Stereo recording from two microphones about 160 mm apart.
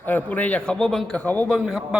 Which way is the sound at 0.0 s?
10° left (ahead or behind).